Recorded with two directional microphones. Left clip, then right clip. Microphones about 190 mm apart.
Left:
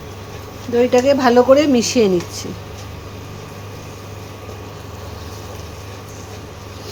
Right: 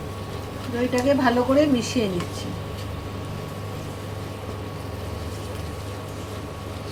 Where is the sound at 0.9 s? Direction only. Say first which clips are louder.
Left 7 dB; 55° left (ahead or behind).